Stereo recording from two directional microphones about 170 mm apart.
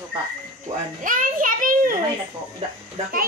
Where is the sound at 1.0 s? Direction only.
55° right (ahead or behind).